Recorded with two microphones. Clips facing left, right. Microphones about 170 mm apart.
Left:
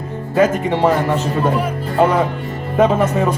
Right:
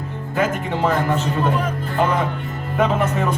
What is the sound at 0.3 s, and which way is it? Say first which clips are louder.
Speech: left 6 dB; 40° left (ahead or behind).